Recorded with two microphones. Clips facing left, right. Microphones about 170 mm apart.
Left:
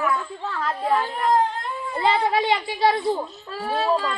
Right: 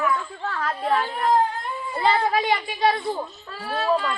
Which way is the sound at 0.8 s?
15° left (ahead or behind).